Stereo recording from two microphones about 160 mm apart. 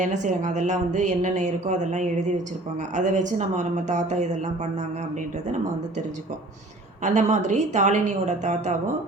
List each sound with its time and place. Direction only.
0.0 s a woman's voice: 50° right (ahead or behind)
7.0 s a woman's voice: 45° right (ahead or behind)